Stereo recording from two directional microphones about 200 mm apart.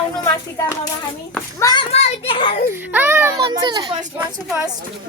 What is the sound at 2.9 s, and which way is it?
A woman's voice, 10° right (ahead or behind).